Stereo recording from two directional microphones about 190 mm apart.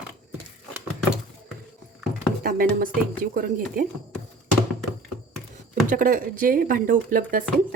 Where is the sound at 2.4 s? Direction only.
50° right (ahead or behind).